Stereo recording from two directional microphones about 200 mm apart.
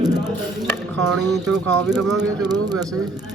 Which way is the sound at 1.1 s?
Centre (ahead or behind).